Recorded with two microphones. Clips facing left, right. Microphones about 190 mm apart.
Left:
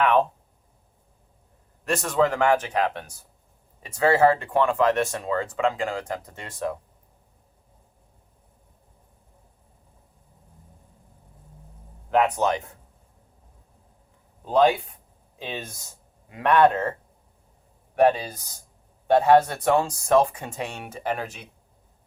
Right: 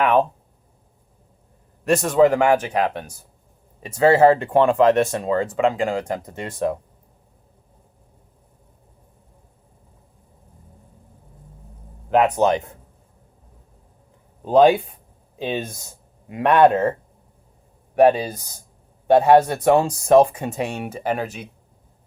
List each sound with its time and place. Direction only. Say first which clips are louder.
0.0 s speech: right 3 dB; 10° right (ahead or behind)
1.8 s speech: right 7 dB; 15° right (ahead or behind)
12.1 s speech: right 5 dB; 20° right (ahead or behind)
14.4 s speech: right 6 dB; 15° right (ahead or behind)
17.9 s speech: right 5 dB; 15° right (ahead or behind)